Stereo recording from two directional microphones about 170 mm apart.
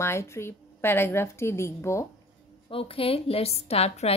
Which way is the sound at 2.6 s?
35° left (ahead or behind).